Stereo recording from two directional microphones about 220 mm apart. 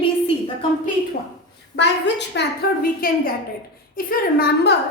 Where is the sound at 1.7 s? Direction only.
55° left (ahead or behind).